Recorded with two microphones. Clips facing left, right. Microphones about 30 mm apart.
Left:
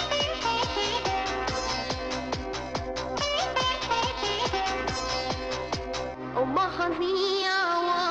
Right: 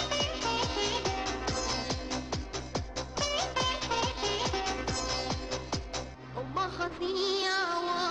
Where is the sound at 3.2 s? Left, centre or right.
Centre.